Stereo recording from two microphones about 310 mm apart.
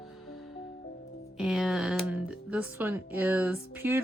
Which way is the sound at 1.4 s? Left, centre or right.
Centre.